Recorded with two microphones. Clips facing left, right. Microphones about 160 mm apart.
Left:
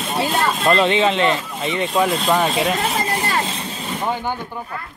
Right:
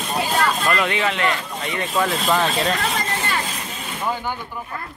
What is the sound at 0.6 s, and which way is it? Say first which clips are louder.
Speech: left 5 dB; 25° left (ahead or behind).